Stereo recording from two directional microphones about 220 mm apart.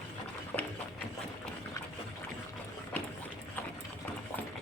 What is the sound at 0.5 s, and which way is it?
Run, 5° left (ahead or behind).